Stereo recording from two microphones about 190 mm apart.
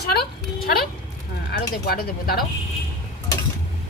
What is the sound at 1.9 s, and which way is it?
Speech, 50° left (ahead or behind).